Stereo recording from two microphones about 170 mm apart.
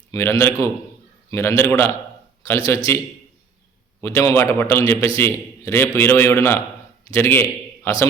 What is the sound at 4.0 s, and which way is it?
A man's voice, 15° left (ahead or behind).